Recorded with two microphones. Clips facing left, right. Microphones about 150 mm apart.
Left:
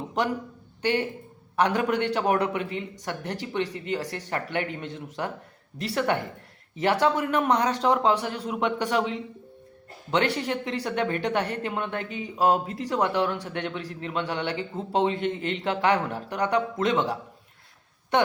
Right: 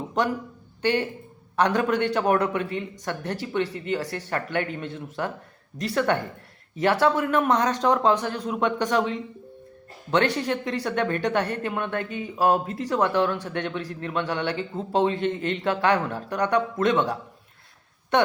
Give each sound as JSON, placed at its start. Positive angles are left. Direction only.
{"t": 0.8, "sound": "a man's voice", "side_deg": 15}